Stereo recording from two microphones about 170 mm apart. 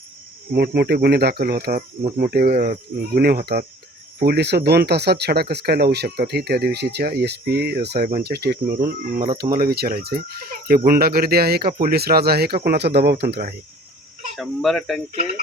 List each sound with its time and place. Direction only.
0.5 s speech: 70° right (ahead or behind)
14.3 s speech: centre (ahead or behind)